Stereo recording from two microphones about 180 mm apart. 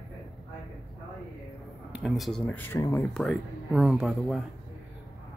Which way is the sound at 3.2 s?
Centre (ahead or behind).